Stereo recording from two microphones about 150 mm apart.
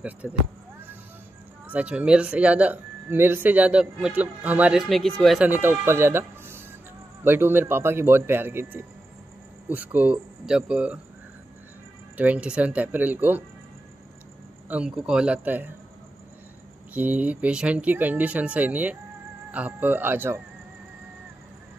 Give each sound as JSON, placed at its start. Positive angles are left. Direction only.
{"t": 0.0, "sound": "basketball bounce", "side_deg": -10}
{"t": 1.7, "sound": "speech", "side_deg": -10}
{"t": 5.5, "sound": "speech", "side_deg": -15}
{"t": 12.2, "sound": "speech", "side_deg": -10}
{"t": 14.7, "sound": "speech", "side_deg": -5}
{"t": 16.9, "sound": "speech", "side_deg": -10}